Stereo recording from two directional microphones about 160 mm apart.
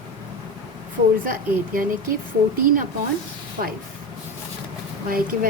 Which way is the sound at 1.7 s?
60° right (ahead or behind).